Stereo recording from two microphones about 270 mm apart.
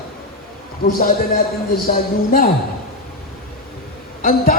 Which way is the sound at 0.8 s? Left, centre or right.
Left.